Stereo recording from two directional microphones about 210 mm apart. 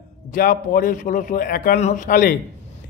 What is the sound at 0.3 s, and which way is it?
A man's voice, 40° left (ahead or behind).